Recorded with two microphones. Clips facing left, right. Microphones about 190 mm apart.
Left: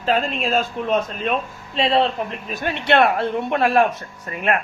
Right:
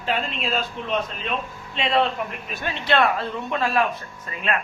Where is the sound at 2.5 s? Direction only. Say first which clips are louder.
Left 4 dB; 55° left (ahead or behind).